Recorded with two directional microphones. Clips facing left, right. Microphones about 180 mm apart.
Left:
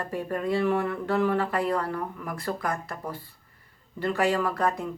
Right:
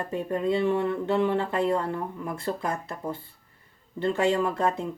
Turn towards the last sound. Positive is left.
turn(degrees=-25)  # may be behind; listen again after turning